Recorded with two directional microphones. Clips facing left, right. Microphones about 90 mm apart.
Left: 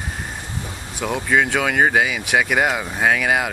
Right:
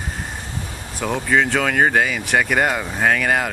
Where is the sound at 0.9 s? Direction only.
5° left (ahead or behind).